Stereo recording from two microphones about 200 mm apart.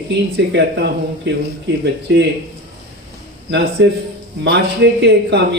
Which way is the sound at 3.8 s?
60° right (ahead or behind).